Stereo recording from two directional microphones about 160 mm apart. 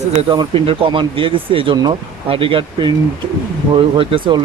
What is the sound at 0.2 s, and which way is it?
Speech, 30° right (ahead or behind).